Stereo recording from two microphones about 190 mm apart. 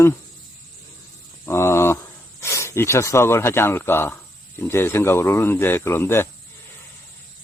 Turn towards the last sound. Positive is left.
turn(degrees=10)  # may be behind; listen again after turning